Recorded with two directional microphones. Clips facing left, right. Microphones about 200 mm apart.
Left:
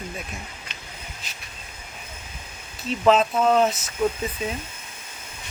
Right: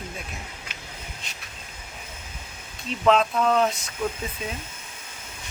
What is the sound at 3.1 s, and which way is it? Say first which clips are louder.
Speech: left 2 dB; centre (ahead or behind).